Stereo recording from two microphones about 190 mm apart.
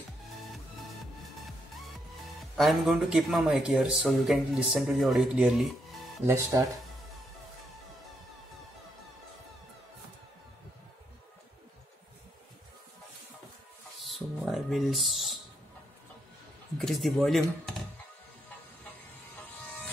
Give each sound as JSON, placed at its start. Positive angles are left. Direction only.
{"t": 2.5, "sound": "speech", "side_deg": 0}
{"t": 6.2, "sound": "speech", "side_deg": -15}
{"t": 13.9, "sound": "a sound", "side_deg": 0}
{"t": 16.7, "sound": "speech", "side_deg": 0}